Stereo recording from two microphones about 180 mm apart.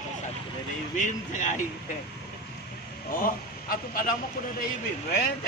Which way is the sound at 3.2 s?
50° left (ahead or behind).